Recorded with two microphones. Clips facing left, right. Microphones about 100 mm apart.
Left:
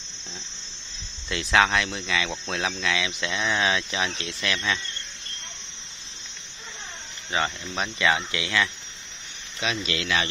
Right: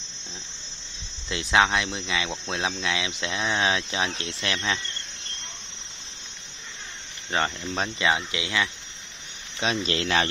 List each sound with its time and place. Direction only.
1.3 s speech: 25° right (ahead or behind)
7.7 s speech: 30° right (ahead or behind)
9.6 s speech: 35° right (ahead or behind)